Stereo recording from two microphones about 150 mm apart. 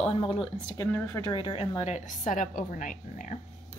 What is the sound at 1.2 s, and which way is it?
A woman's voice, 35° left (ahead or behind).